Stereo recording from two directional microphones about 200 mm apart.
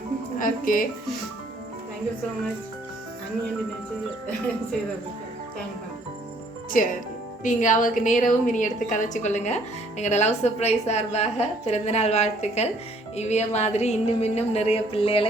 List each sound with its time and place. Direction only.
0.3 s speech: 45° left (ahead or behind)
6.8 s a woman's voice: 40° left (ahead or behind)